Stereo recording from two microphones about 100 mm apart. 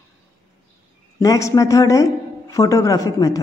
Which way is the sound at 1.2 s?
35° left (ahead or behind).